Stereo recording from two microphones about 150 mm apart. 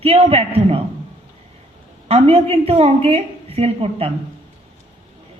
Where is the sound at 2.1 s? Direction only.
40° right (ahead or behind).